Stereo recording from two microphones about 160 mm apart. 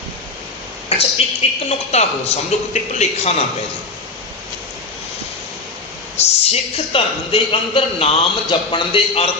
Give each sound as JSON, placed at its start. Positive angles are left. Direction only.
{"t": 0.9, "sound": "a woman's voice", "side_deg": 35}
{"t": 6.1, "sound": "a man's voice", "side_deg": 40}